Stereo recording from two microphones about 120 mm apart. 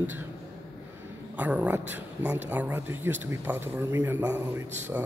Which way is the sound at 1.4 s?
15° right (ahead or behind).